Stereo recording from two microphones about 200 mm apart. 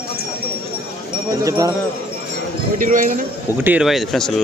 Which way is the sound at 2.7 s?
40° right (ahead or behind).